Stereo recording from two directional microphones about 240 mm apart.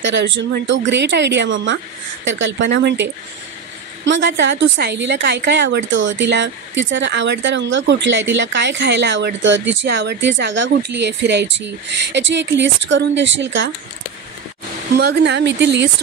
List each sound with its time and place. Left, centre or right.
0.0 s a woman's voice: right
15.0 s a woman's voice: right